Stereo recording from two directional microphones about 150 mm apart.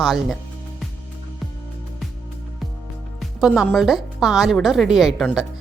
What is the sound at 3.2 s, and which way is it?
A woman's voice, 5° right (ahead or behind).